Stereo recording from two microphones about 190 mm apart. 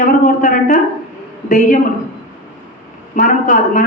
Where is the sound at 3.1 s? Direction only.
45° left (ahead or behind).